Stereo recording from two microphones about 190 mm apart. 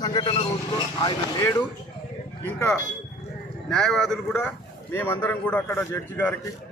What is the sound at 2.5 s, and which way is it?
Speech, 15° left (ahead or behind).